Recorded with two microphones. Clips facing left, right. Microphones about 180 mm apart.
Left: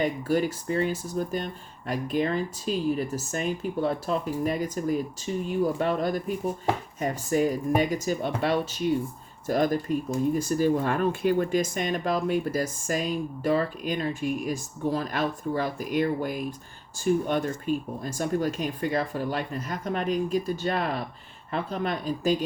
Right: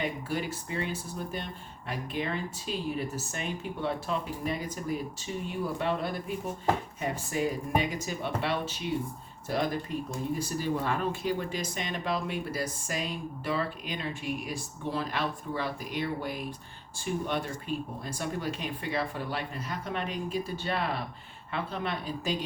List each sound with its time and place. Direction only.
0.0 s speech: 40° left (ahead or behind)